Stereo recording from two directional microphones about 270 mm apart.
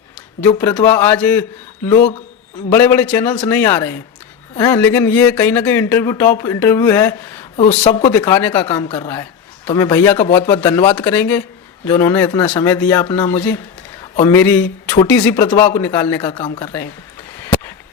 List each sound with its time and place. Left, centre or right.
0.4 s speech: centre
7.5 s speech: left